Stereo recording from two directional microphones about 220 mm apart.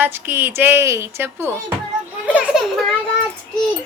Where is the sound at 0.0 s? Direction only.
10° right (ahead or behind).